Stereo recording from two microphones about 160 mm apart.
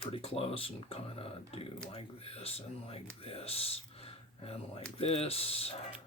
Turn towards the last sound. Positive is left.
turn(degrees=40)  # may be behind; listen again after turning